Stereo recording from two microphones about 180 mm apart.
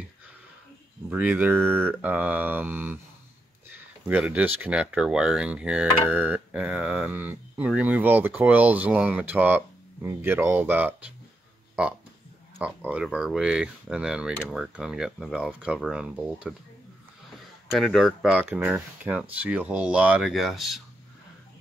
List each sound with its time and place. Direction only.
1.1 s speech: 10° right (ahead or behind)
4.1 s speech: 10° right (ahead or behind)
12.5 s speech: 10° right (ahead or behind)
17.7 s speech: centre (ahead or behind)